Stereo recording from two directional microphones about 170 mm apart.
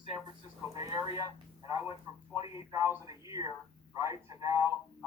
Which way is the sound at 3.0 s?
20° right (ahead or behind).